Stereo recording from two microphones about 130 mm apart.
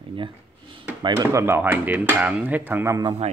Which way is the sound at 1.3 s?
20° right (ahead or behind).